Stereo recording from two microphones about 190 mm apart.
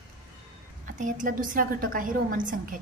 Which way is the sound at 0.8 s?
40° right (ahead or behind).